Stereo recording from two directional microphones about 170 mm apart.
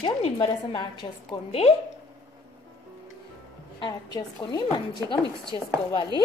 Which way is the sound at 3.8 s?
25° left (ahead or behind).